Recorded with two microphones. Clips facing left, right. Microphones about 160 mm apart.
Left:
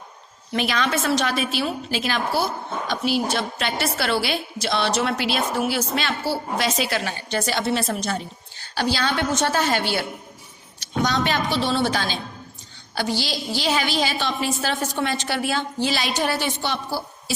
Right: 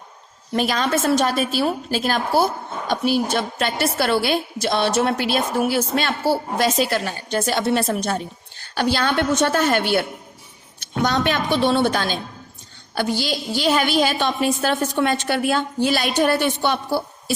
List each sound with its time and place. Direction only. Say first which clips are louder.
0.5 s a woman's voice: right 3 dB; 45° right (ahead or behind)
10.8 s a sound: right 2 dB; 55° right (ahead or behind)
11.5 s a woman's voice: right 7 dB; 55° right (ahead or behind)